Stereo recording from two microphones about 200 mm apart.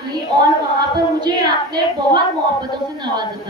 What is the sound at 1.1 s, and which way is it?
A woman's voice, 20° right (ahead or behind).